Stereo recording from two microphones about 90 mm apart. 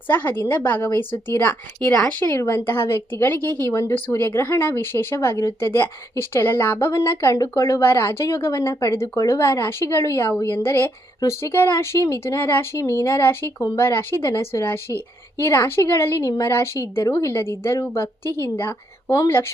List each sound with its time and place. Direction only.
0.1 s a woman's voice: 20° left (ahead or behind)
1.9 s speech: 5° left (ahead or behind)
2.3 s a woman's voice: 30° left (ahead or behind)
3.7 s a woman's voice: 35° left (ahead or behind)